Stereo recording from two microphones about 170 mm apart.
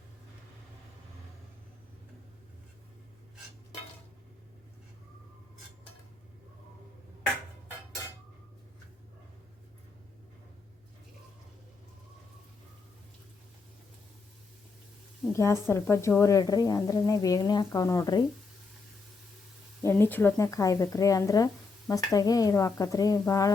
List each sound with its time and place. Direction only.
15.3 s speech: 15° left (ahead or behind)
19.8 s speech: 15° left (ahead or behind)